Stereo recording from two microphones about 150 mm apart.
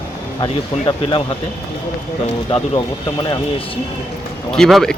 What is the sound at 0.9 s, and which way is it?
Speech, 35° left (ahead or behind).